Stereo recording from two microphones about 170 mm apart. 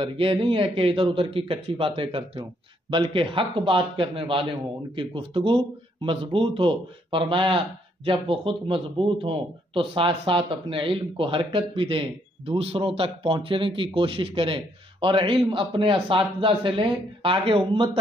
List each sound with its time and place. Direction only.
0.0 s a man's voice: 30° right (ahead or behind)